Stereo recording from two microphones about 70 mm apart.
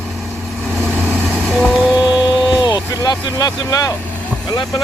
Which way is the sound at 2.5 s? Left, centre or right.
Left.